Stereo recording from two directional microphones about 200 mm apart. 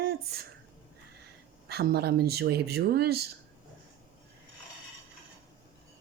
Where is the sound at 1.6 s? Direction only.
50° right (ahead or behind).